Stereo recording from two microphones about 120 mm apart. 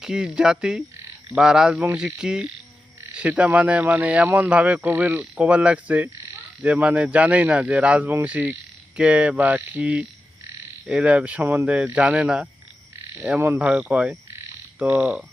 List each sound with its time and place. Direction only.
0.0 s speech: 5° right (ahead or behind)
13.1 s frog: 15° right (ahead or behind)
13.6 s speech: 10° right (ahead or behind)